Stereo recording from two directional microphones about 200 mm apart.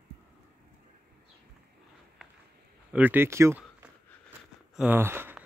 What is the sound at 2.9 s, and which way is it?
Speech, 10° right (ahead or behind).